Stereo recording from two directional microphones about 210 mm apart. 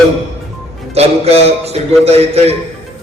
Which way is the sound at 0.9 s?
30° right (ahead or behind).